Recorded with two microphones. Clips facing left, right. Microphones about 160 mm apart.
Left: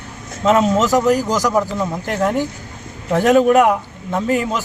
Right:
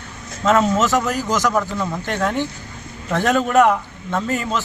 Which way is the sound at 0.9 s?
35° left (ahead or behind).